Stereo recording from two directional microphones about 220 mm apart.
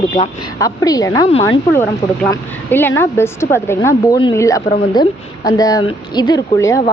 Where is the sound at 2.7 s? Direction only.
10° left (ahead or behind).